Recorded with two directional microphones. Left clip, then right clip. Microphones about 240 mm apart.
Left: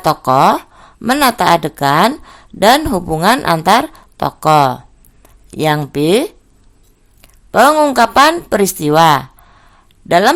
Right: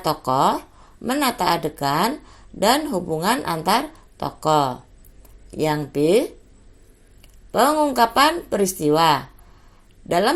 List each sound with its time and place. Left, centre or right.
0.0 s speech: left
7.2 s a sound: left
8.1 s speech: left